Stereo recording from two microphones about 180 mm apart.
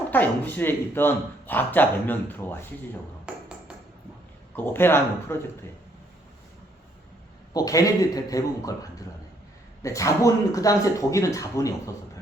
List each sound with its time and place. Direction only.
0.1 s speech: 10° left (ahead or behind)
3.3 s music: 5° right (ahead or behind)
4.5 s speech: 10° left (ahead or behind)
7.5 s a man's voice: 20° left (ahead or behind)